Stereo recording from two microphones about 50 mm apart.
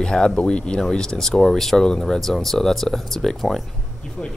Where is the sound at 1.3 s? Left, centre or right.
Centre.